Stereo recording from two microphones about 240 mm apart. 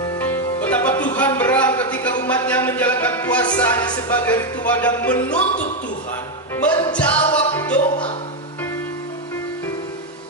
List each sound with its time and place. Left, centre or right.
0.2 s music: centre
3.5 s speech: centre
6.7 s music: centre
6.9 s music: centre